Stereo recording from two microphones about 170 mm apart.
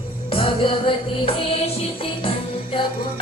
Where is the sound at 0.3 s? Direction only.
30° left (ahead or behind).